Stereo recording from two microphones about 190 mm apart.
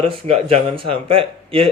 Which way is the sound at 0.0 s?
30° right (ahead or behind).